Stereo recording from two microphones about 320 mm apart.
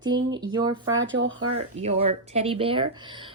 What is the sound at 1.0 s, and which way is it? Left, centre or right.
Speech, right.